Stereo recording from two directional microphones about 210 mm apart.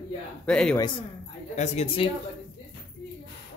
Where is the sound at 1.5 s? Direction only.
30° left (ahead or behind).